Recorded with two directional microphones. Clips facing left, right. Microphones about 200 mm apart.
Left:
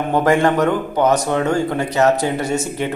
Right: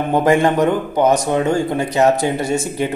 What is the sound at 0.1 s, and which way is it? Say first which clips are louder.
A man's voice: right 1 dB; 15° right (ahead or behind).